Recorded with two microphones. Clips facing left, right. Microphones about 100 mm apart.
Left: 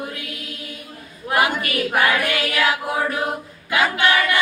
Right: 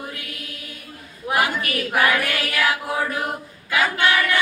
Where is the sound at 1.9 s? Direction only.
20° left (ahead or behind).